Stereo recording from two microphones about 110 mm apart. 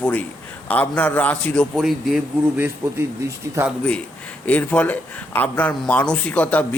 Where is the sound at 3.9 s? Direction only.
10° left (ahead or behind).